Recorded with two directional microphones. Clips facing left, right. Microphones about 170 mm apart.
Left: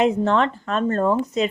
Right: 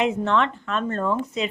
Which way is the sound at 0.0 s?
35° left (ahead or behind).